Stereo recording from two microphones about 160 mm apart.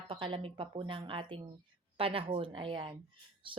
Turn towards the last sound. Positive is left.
turn(degrees=-30)  # may be behind; listen again after turning